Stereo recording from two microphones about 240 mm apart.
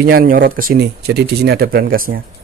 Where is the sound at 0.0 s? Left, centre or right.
Right.